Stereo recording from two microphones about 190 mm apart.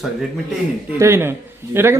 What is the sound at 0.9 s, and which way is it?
Speech, 15° right (ahead or behind).